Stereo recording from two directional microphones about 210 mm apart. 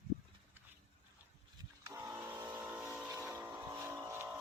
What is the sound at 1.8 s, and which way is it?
Vehicle, 15° right (ahead or behind).